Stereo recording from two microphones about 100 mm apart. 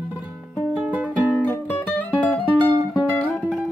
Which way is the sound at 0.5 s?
15° right (ahead or behind).